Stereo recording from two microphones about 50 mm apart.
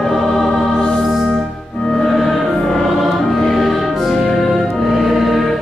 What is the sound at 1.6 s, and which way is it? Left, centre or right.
Music, centre.